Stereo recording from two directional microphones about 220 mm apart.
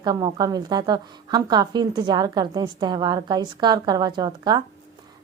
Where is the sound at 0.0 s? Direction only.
20° right (ahead or behind).